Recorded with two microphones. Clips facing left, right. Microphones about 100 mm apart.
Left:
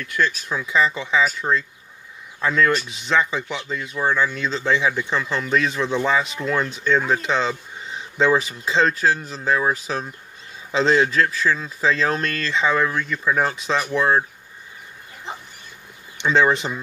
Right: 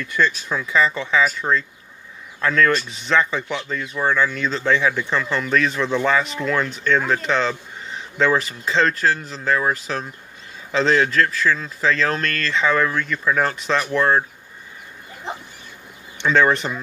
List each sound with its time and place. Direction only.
0.0 s speech: 5° left (ahead or behind)
2.4 s speech: 10° left (ahead or behind)
16.3 s speech: 10° left (ahead or behind)